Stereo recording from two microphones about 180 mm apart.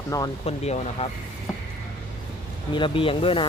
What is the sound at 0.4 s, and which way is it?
Speech, 35° left (ahead or behind).